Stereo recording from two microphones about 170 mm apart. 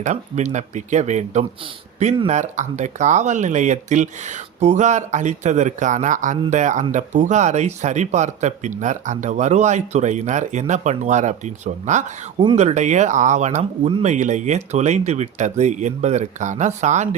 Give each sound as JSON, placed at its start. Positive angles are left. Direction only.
{"t": 0.0, "sound": "speech", "side_deg": -45}